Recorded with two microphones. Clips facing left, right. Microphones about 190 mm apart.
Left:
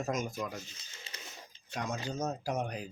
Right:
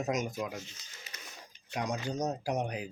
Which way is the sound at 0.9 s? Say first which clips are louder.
Left 4 dB; 25° left (ahead or behind).